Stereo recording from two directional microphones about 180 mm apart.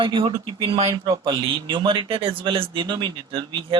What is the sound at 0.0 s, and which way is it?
A woman's voice, 25° right (ahead or behind).